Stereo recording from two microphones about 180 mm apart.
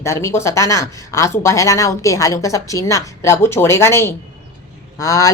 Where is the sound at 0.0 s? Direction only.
15° left (ahead or behind).